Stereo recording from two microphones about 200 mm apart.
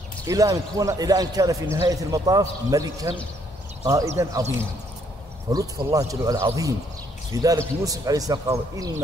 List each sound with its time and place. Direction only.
0.3 s a man's voice: 15° right (ahead or behind)
5.5 s a man's voice: 20° right (ahead or behind)